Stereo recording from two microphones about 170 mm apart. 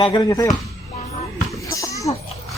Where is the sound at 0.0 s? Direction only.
25° left (ahead or behind).